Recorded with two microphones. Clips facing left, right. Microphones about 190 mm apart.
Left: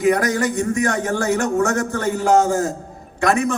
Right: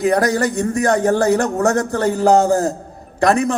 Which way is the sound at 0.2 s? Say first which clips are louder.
Right 3 dB; 35° right (ahead or behind).